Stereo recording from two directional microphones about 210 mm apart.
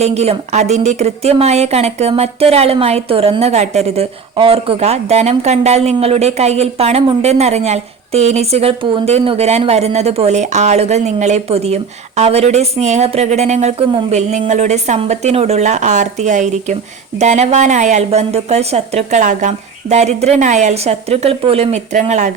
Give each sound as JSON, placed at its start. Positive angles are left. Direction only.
{"t": 0.0, "sound": "a woman's voice", "side_deg": -30}